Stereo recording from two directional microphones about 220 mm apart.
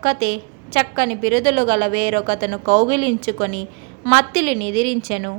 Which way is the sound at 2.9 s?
50° right (ahead or behind).